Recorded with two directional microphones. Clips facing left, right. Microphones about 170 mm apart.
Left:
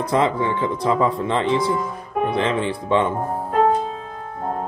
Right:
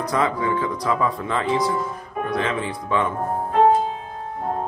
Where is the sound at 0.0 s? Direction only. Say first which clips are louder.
Left 3 dB; 25° left (ahead or behind).